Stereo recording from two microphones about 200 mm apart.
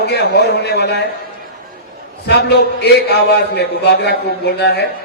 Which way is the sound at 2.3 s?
55° left (ahead or behind).